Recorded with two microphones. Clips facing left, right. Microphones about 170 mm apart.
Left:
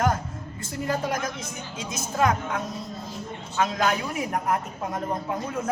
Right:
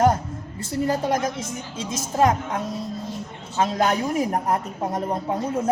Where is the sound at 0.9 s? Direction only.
30° right (ahead or behind).